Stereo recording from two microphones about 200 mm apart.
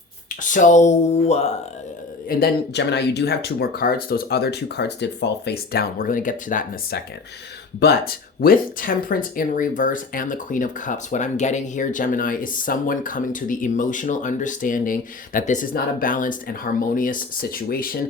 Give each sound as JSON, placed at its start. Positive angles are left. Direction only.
{"t": 0.4, "sound": "speech", "side_deg": 40}
{"t": 2.3, "sound": "speech", "side_deg": 55}